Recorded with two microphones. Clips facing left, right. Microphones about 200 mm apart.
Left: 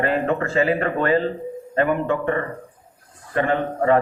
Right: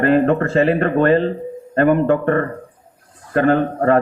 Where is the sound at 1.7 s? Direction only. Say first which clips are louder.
Right 6 dB; 50° right (ahead or behind).